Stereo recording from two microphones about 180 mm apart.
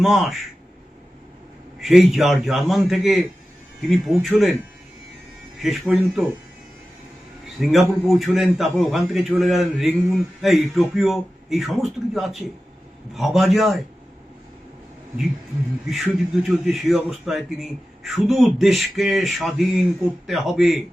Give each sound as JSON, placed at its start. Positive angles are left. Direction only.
{"t": 0.0, "sound": "a man's voice", "side_deg": 0}
{"t": 1.8, "sound": "a man's voice", "side_deg": 0}
{"t": 5.6, "sound": "a man's voice", "side_deg": 0}
{"t": 7.6, "sound": "a man's voice", "side_deg": 0}
{"t": 16.4, "sound": "a man's voice", "side_deg": 0}